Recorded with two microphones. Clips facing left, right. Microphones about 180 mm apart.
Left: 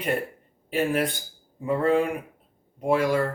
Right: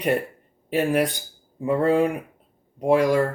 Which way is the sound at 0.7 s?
40° right (ahead or behind).